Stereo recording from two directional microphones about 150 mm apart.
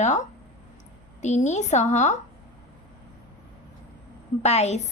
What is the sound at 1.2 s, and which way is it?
Speech, 50° left (ahead or behind).